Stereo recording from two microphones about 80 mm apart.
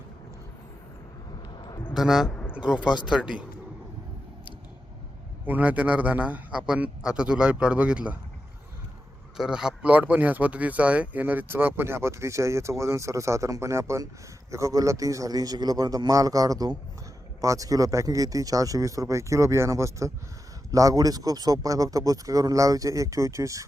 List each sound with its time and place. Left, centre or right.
1.5 s a sound: left
1.9 s speech: centre
2.3 s a sound: left
2.6 s a man's voice: centre
5.5 s a man's voice: centre
9.4 s a man's voice: centre; by 23.6 s right